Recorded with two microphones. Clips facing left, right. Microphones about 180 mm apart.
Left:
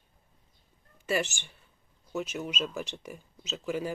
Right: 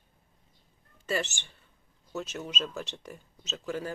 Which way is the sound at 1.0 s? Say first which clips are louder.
Left 2 dB; 10° left (ahead or behind).